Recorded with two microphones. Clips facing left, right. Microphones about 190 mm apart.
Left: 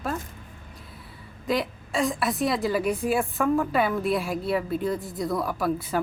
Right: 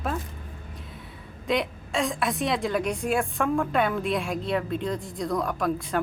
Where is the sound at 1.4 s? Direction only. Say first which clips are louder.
Even; centre (ahead or behind).